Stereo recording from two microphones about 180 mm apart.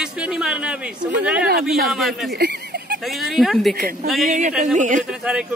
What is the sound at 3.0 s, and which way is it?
Speech, centre (ahead or behind).